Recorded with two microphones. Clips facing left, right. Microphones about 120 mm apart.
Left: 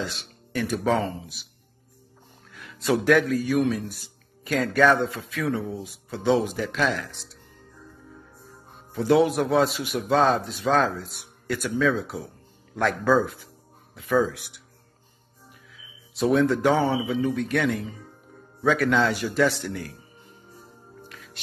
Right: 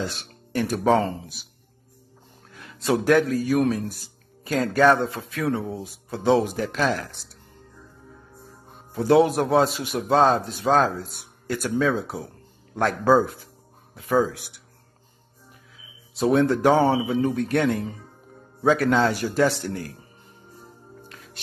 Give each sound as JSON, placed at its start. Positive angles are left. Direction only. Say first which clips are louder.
{"t": 0.0, "sound": "speech", "louder": "right 2 dB", "side_deg": -35}
{"t": 2.5, "sound": "a man's voice", "louder": "right 1 dB", "side_deg": -30}
{"t": 8.9, "sound": "a man's voice", "louder": "right 2 dB", "side_deg": -30}
{"t": 16.2, "sound": "a man's voice", "louder": "right 1 dB", "side_deg": -30}
{"t": 21.1, "sound": "music", "louder": "even", "side_deg": -35}